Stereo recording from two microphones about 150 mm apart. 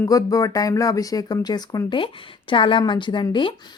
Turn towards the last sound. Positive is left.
turn(degrees=30)  # may be behind; listen again after turning